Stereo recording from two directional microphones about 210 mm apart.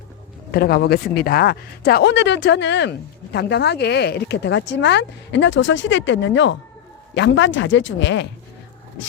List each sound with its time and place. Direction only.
0.5 s a woman's voice: 45° left (ahead or behind)